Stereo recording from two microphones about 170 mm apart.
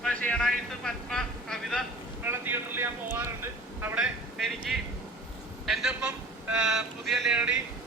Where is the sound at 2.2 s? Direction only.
10° right (ahead or behind).